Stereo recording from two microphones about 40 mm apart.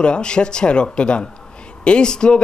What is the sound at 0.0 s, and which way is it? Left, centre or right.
Speech, left.